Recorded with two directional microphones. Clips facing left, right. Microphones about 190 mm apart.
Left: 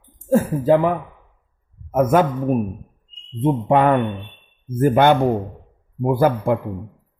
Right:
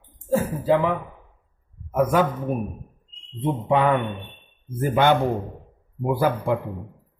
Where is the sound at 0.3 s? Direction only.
50° left (ahead or behind).